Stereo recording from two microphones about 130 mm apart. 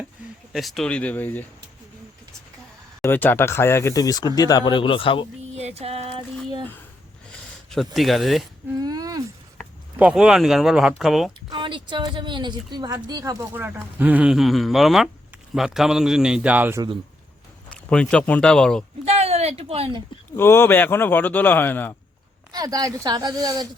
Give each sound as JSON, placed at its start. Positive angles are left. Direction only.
{"t": 0.5, "sound": "speech", "side_deg": 0}
{"t": 3.0, "sound": "speech", "side_deg": 15}
{"t": 5.5, "sound": "a sound", "side_deg": -55}
{"t": 7.7, "sound": "a man's voice", "side_deg": 0}
{"t": 8.8, "sound": "a sound", "side_deg": -30}
{"t": 10.0, "sound": "a man's voice", "side_deg": -5}
{"t": 11.4, "sound": "a man's voice", "side_deg": -35}
{"t": 17.8, "sound": "speech", "side_deg": 10}
{"t": 19.0, "sound": "a sound", "side_deg": -50}
{"t": 20.3, "sound": "speech", "side_deg": 20}
{"t": 22.5, "sound": "speech", "side_deg": -30}